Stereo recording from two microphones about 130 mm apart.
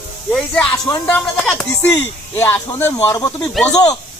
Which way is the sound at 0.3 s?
5° left (ahead or behind).